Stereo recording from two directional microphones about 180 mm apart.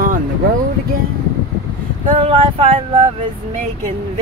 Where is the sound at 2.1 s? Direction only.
30° right (ahead or behind).